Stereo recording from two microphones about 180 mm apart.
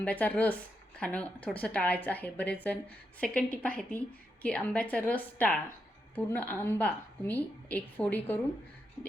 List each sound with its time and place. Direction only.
0.0 s a woman's voice: 10° left (ahead or behind)